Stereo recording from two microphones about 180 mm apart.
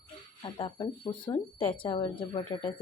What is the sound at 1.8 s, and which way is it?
Speech, 25° left (ahead or behind).